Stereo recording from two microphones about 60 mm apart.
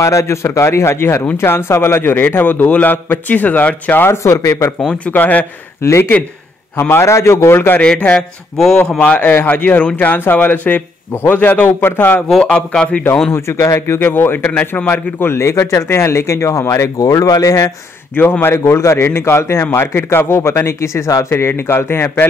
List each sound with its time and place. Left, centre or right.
0.0 s a man's voice: left
4.0 s speech: left
5.1 s speech: left
5.8 s speech: left
7.8 s a man's voice: centre
10.2 s a man's voice: left
12.4 s a man's voice: centre
13.3 s a man's voice: left
17.0 s speech: left
18.1 s a man's voice: left
18.5 s speech: left